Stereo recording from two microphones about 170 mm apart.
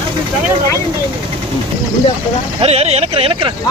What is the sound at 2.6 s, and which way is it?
Speech, 35° right (ahead or behind).